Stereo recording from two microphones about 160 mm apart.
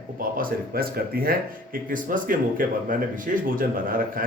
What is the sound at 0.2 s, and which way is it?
Speech, 60° right (ahead or behind).